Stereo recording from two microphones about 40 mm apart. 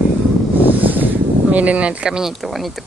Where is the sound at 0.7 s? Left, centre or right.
Right.